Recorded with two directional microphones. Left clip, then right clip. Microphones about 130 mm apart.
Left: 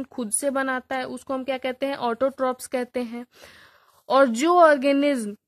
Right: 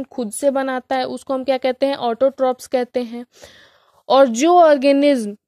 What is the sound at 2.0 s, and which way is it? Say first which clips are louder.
A woman's voice: right 5 dB; 20° right (ahead or behind).